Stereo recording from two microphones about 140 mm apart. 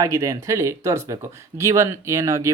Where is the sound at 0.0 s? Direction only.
25° right (ahead or behind).